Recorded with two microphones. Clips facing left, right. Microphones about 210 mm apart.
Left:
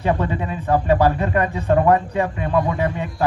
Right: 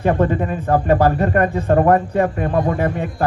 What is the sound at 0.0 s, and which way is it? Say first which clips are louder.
A man's voice: right 4 dB; 50° right (ahead or behind).